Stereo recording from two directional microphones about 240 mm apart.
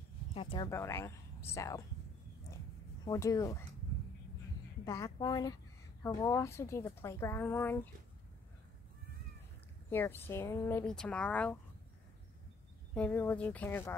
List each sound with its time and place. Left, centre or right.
0.3 s speech: left
0.7 s speech: centre
3.1 s speech: centre
4.8 s speech: centre
9.8 s speech: centre
12.9 s speech: centre